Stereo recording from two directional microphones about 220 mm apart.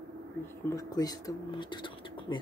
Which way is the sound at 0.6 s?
15° left (ahead or behind).